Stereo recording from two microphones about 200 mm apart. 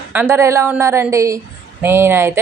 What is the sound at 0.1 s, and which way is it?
Speech, 10° right (ahead or behind).